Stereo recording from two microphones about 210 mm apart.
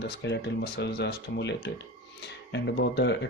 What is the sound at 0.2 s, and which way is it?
Speech, 55° left (ahead or behind).